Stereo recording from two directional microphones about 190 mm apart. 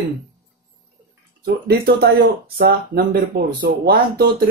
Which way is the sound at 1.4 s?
55° right (ahead or behind).